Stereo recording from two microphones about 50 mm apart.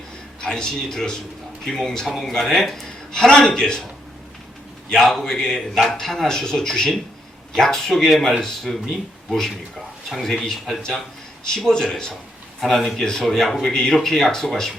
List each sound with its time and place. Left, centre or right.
0.4 s a man's voice: centre
3.2 s speech: centre
4.9 s speech: centre
11.4 s speech: centre